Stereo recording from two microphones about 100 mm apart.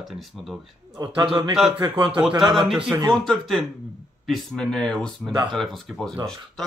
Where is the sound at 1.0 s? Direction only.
30° right (ahead or behind).